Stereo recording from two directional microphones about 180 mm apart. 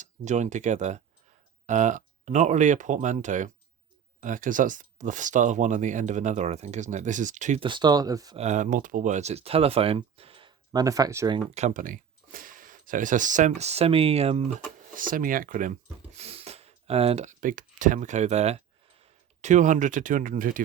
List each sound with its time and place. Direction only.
0.0 s speech: 40° right (ahead or behind)
7.6 s speech: 25° right (ahead or behind)
8.4 s speech: 40° right (ahead or behind); by 11.3 s 20° right (ahead or behind)
11.5 s speech: 40° right (ahead or behind)
14.9 s speech: 50° right (ahead or behind)